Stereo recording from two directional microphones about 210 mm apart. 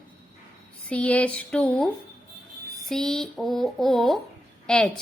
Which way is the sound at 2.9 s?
Centre (ahead or behind).